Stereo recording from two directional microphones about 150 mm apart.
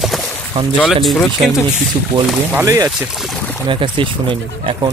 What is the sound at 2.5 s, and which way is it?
Speech, 20° right (ahead or behind).